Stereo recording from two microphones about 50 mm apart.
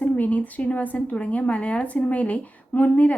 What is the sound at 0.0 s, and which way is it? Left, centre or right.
A woman's voice, left.